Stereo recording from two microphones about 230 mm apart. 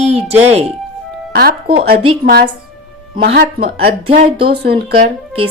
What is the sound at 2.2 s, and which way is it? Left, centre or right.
Speech, right.